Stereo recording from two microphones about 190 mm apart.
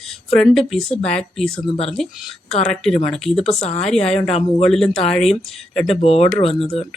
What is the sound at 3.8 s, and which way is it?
Speech, 5° left (ahead or behind).